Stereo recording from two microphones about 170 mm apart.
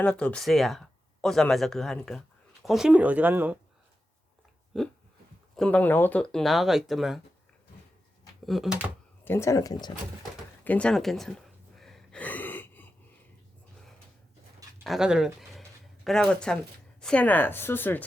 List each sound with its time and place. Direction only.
0.0 s speech: 5° left (ahead or behind); by 3.6 s 10° right (ahead or behind)
4.7 s speech: centre (ahead or behind)
8.4 s speech: centre (ahead or behind)
9.2 s speech: 15° left (ahead or behind)
10.6 s gasp: 10° left (ahead or behind)
14.8 s speech: 5° right (ahead or behind)